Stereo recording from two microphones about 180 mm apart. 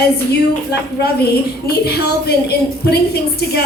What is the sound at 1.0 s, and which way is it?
Speech, 65° left (ahead or behind).